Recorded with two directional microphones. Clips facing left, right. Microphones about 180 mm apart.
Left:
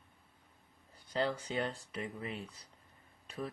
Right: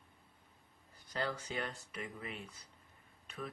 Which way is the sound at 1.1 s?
30° left (ahead or behind).